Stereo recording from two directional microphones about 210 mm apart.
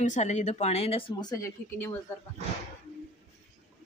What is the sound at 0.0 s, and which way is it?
Speech, 35° left (ahead or behind).